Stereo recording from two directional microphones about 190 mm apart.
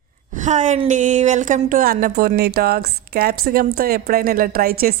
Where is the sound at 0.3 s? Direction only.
40° right (ahead or behind).